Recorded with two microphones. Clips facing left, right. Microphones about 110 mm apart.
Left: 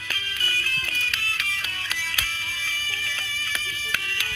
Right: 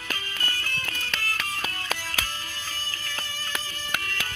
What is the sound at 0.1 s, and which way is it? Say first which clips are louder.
Music: even; 40° right (ahead or behind).